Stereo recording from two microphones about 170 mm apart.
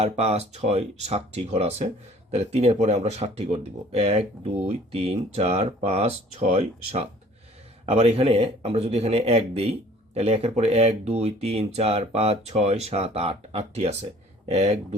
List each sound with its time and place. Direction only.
0.0 s speech: 40° right (ahead or behind)